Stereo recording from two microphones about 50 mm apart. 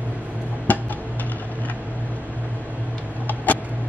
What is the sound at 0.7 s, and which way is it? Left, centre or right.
Music, left.